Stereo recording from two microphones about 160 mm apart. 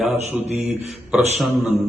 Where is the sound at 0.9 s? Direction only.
Centre (ahead or behind).